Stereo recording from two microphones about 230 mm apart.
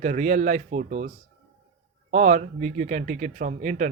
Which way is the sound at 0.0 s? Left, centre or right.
Right.